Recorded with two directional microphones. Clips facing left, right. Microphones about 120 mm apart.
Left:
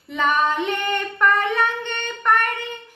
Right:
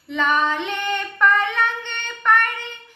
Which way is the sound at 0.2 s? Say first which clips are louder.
Left 1 dB; 40° left (ahead or behind).